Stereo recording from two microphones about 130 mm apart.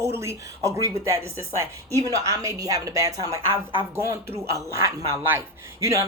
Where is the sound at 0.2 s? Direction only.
20° right (ahead or behind).